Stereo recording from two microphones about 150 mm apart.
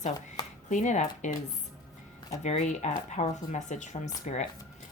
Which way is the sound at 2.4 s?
50° left (ahead or behind).